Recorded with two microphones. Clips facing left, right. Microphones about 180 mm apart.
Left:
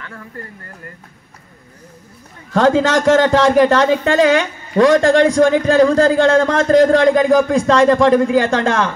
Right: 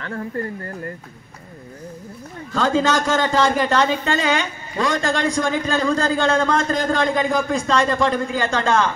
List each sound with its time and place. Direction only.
0.0 s speech: 40° right (ahead or behind)
2.5 s a man's voice: 75° left (ahead or behind)